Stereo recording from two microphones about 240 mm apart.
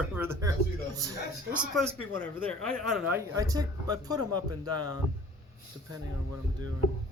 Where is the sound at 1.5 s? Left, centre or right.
Centre.